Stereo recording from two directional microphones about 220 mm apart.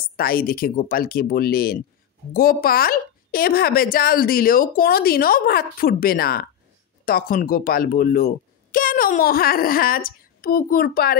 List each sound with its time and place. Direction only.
0.1 s speech: 40° left (ahead or behind)